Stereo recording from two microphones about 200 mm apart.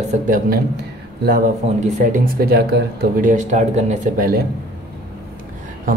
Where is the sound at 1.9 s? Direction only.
45° right (ahead or behind).